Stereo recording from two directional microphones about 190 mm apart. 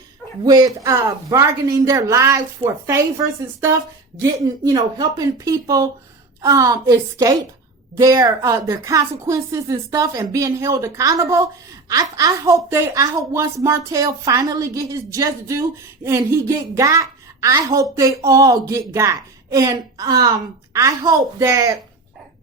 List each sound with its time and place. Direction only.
0.4 s a woman's voice: 20° right (ahead or behind)
4.4 s a woman's voice: 20° right (ahead or behind)